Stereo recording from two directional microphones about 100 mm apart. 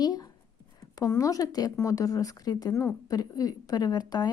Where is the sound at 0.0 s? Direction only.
40° left (ahead or behind).